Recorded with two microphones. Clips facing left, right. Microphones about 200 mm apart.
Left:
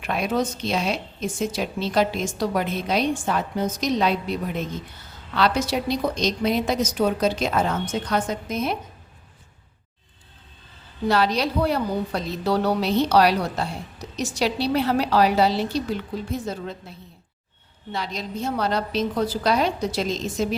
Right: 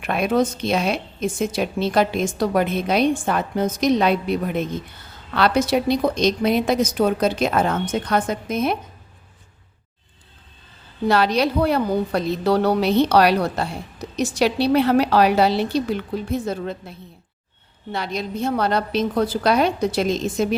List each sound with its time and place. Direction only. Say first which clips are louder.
0.0 s a woman's voice: right 4 dB; 55° right (ahead or behind)
11.1 s a woman's voice: right 3 dB; 60° right (ahead or behind)
17.9 s a woman's voice: right 4 dB; 60° right (ahead or behind)